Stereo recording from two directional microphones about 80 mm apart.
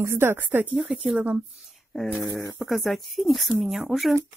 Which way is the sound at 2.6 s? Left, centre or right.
Centre.